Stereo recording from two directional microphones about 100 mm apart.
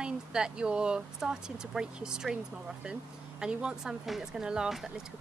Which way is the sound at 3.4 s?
10° right (ahead or behind).